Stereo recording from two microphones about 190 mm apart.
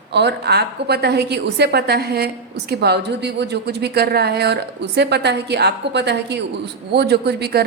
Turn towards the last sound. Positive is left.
turn(degrees=-60)  # may be behind; listen again after turning